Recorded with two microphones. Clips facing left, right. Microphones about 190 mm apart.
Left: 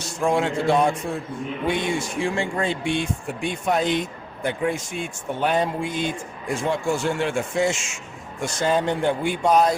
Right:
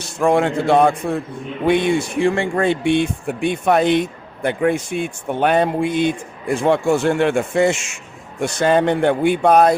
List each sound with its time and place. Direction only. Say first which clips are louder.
0.2 s speech: right 5 dB; 60° right (ahead or behind)